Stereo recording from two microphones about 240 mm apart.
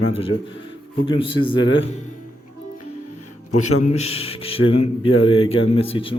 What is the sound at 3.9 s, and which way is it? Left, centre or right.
Speech, left.